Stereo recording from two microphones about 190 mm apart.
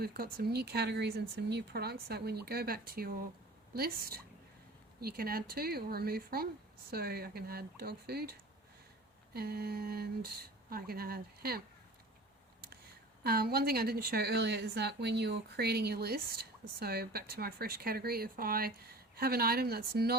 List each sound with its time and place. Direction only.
0.0 s a woman's voice: 55° right (ahead or behind)
13.2 s a woman's voice: 55° right (ahead or behind)